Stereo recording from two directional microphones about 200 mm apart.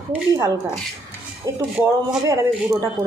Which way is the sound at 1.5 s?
15° right (ahead or behind).